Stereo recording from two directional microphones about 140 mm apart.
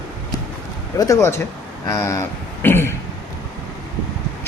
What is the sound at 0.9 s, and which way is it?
Speech, 25° left (ahead or behind).